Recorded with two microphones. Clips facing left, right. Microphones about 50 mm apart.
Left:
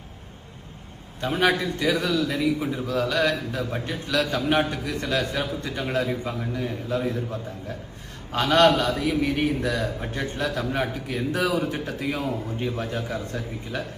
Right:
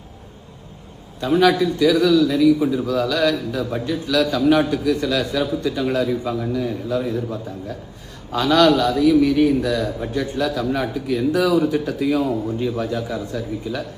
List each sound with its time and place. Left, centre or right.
1.2 s a man's voice: left
8.3 s a man's voice: left
12.2 s a man's voice: right
12.5 s a man's voice: left